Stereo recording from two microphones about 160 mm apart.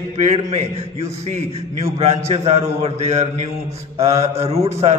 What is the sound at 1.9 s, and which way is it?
A man's voice, 40° right (ahead or behind).